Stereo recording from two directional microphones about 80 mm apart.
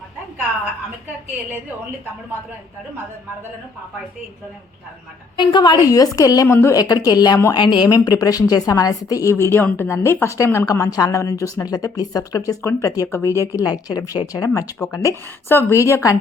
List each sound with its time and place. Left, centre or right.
5.4 s a woman's voice: left
6.5 s a woman's voice: left
6.7 s speech: left
7.5 s a woman's voice: left
9.3 s a woman's voice: left
10.7 s a woman's voice: left
13.6 s a woman's voice: left